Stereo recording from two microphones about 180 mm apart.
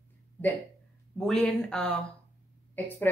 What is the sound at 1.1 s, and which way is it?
A woman's voice, 5° left (ahead or behind).